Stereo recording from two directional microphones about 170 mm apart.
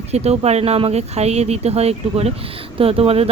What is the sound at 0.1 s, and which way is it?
Speech, 40° right (ahead or behind).